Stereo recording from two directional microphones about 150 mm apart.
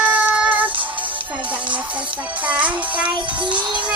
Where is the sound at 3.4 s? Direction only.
30° right (ahead or behind).